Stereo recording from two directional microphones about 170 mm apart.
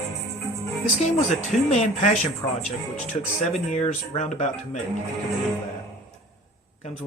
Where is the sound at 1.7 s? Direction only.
40° left (ahead or behind).